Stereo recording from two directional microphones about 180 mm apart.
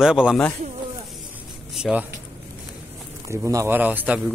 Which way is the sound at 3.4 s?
15° right (ahead or behind).